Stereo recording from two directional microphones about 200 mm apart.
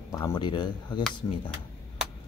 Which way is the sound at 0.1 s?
15° left (ahead or behind).